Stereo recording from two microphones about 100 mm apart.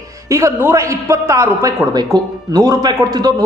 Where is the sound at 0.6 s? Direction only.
25° right (ahead or behind).